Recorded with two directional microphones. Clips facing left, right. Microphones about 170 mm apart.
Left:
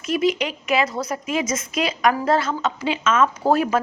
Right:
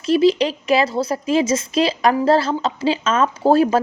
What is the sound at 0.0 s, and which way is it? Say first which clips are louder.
Speech: right 6 dB; 30° right (ahead or behind).